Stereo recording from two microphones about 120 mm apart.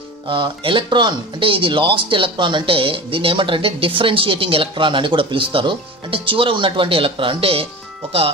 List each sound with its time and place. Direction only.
0.3 s speech: 45° right (ahead or behind)